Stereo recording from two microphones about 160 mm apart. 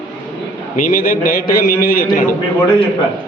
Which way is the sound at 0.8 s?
55° left (ahead or behind).